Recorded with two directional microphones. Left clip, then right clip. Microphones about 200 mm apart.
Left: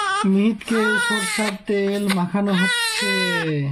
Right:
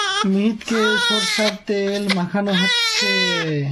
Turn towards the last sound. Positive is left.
turn(degrees=-10)  # may be behind; listen again after turning